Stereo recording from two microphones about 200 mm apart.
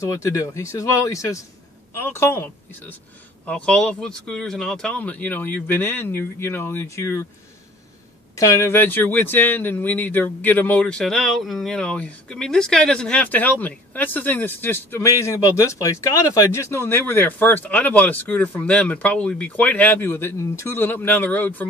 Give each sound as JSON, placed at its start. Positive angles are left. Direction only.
{"t": 0.0, "sound": "speech", "side_deg": 15}
{"t": 8.4, "sound": "speech", "side_deg": 15}